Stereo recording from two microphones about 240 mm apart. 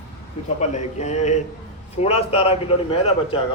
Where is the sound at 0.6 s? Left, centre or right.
Left.